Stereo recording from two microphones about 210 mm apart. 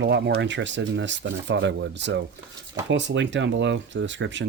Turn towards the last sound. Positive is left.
turn(degrees=-60)  # may be behind; listen again after turning